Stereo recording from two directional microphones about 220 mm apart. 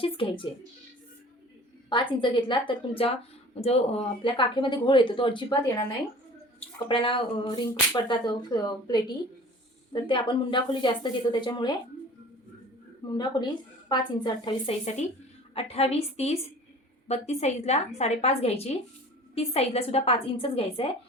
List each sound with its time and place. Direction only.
0.0 s speech: 25° left (ahead or behind)
1.9 s speech: 20° left (ahead or behind)
6.8 s speech: 25° left (ahead or behind)
13.1 s speech: 20° left (ahead or behind)